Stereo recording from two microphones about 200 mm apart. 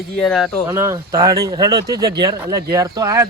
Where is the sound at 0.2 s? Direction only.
Centre (ahead or behind).